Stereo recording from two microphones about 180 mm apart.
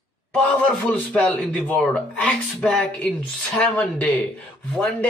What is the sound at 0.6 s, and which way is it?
Speech, 10° left (ahead or behind).